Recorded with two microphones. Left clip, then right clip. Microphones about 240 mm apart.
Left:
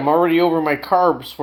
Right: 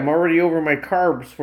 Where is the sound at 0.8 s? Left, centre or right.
Left.